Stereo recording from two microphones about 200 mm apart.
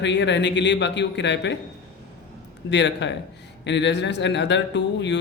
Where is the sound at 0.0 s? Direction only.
60° left (ahead or behind).